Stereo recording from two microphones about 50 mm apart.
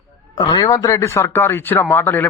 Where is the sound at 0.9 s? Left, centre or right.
Left.